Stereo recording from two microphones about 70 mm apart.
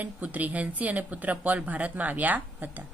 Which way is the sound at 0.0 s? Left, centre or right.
Right.